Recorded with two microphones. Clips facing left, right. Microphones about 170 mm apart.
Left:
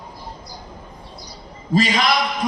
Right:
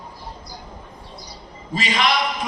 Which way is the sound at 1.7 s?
40° left (ahead or behind).